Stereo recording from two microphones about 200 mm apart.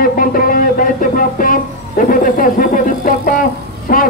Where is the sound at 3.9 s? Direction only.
45° left (ahead or behind).